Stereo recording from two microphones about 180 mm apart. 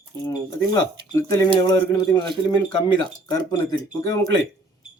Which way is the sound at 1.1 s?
15° left (ahead or behind).